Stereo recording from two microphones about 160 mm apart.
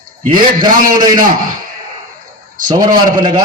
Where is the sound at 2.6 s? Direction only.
25° right (ahead or behind).